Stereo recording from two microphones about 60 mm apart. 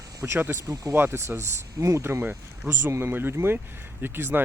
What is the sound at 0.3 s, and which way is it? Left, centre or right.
Speech, right.